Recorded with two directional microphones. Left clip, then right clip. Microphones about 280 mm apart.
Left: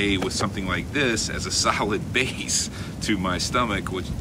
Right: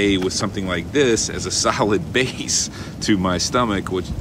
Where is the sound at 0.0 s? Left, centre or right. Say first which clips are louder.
Right 5 dB; centre.